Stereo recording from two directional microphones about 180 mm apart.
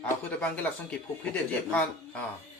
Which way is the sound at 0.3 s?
10° left (ahead or behind).